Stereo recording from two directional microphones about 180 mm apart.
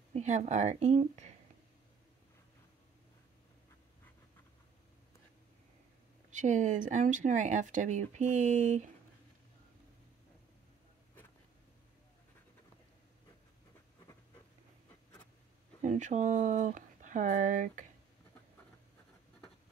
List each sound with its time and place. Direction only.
0.1 s a woman's voice: 40° right (ahead or behind)
6.3 s speech: 45° right (ahead or behind)
15.8 s speech: 40° right (ahead or behind)